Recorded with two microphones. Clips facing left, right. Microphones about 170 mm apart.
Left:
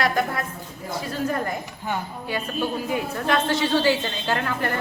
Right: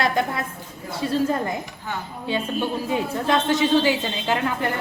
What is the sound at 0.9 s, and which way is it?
Speech, 25° right (ahead or behind).